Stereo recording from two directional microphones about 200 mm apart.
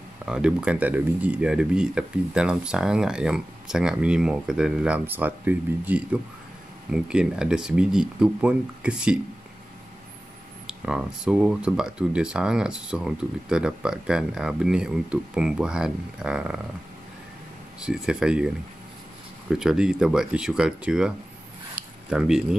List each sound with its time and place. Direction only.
0.2 s speech: 5° right (ahead or behind)
10.7 s speech: 5° right (ahead or behind)
17.7 s speech: 5° right (ahead or behind)
19.5 s speech: 5° right (ahead or behind)
21.7 s a sound: 5° right (ahead or behind)